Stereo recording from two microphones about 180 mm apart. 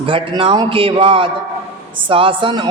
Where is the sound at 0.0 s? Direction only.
30° right (ahead or behind).